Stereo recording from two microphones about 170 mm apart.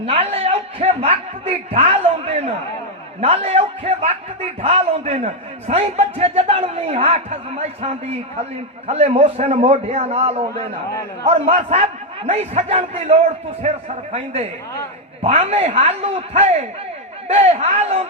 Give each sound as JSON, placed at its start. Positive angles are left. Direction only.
{"t": 0.0, "sound": "a man's voice", "side_deg": -35}